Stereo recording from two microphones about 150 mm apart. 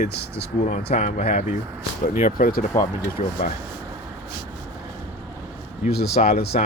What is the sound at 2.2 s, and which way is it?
Speech, 65° left (ahead or behind).